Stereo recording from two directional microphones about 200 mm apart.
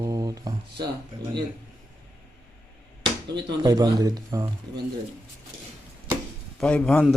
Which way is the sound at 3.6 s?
20° right (ahead or behind).